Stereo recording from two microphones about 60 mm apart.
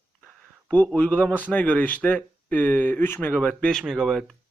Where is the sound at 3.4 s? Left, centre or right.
Centre.